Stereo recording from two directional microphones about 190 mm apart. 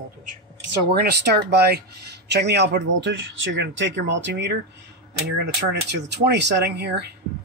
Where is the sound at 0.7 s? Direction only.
60° right (ahead or behind).